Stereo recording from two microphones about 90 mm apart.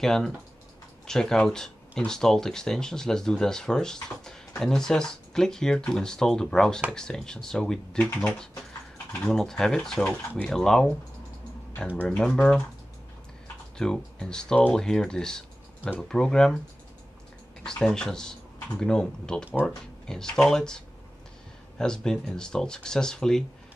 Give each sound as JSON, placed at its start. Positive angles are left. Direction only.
{"t": 0.0, "sound": "speech", "side_deg": 5}
{"t": 8.0, "sound": "speech", "side_deg": 20}
{"t": 9.3, "sound": "speech", "side_deg": 5}
{"t": 12.2, "sound": "speech", "side_deg": 10}
{"t": 13.7, "sound": "speech", "side_deg": 5}
{"t": 17.6, "sound": "speech", "side_deg": 10}